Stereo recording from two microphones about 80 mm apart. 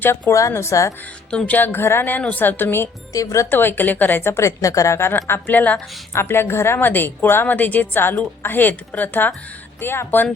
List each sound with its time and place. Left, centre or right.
0.0 s a woman's voice: left
1.3 s speech: centre
1.5 s a woman's voice: left
3.1 s speech: left
3.5 s a woman's voice: left